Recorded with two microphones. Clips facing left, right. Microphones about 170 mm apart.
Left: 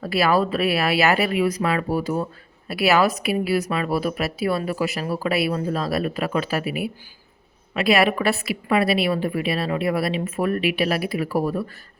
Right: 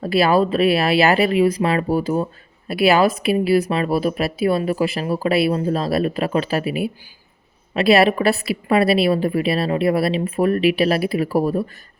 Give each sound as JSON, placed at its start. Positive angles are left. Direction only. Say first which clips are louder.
{"t": 0.0, "sound": "a woman's voice", "louder": "right 4 dB", "side_deg": -25}